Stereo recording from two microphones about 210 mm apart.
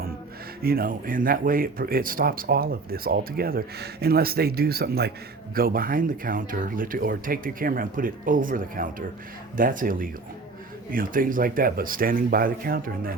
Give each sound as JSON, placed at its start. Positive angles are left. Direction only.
{"t": 0.6, "sound": "speech", "side_deg": -45}